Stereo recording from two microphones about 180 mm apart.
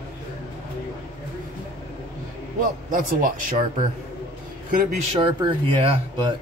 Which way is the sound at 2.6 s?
50° right (ahead or behind).